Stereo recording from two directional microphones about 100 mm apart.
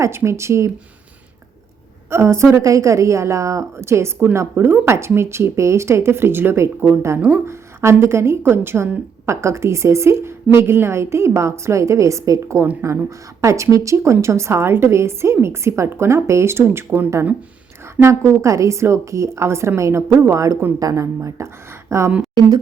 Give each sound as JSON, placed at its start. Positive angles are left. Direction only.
{"t": 0.0, "sound": "a woman's voice", "side_deg": -25}
{"t": 2.0, "sound": "a woman's voice", "side_deg": -25}